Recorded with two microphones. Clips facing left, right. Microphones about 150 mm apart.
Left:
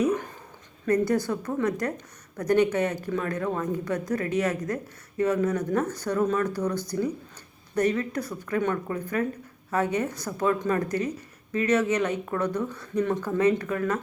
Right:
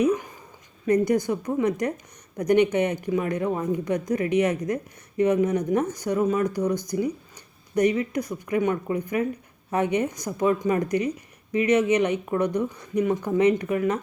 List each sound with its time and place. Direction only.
0.9 s speech: 15° right (ahead or behind)